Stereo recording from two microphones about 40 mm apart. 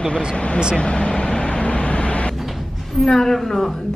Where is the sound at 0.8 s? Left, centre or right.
Left.